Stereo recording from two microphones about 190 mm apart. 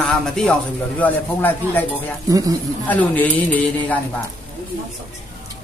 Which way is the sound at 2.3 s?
20° right (ahead or behind).